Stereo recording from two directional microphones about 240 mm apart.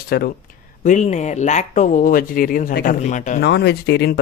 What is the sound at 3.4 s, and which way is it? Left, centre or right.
Speech, left.